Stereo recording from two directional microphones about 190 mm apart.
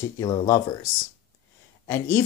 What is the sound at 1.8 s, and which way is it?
Speech, 15° left (ahead or behind).